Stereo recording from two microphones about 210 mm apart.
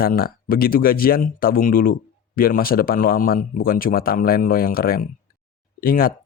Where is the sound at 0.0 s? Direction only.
45° left (ahead or behind).